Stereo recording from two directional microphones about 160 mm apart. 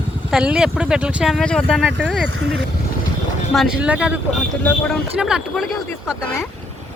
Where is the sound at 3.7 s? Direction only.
5° right (ahead or behind).